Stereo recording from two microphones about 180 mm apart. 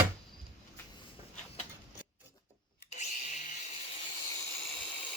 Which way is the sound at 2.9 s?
40° left (ahead or behind).